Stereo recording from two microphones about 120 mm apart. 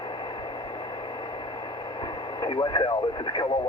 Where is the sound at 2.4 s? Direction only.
40° left (ahead or behind).